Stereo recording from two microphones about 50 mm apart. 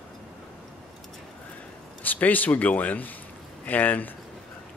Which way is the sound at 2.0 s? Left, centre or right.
Left.